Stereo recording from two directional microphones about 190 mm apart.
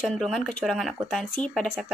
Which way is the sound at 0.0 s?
5° left (ahead or behind).